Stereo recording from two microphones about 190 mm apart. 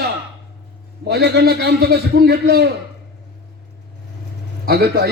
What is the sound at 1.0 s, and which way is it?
A man's voice, 60° right (ahead or behind).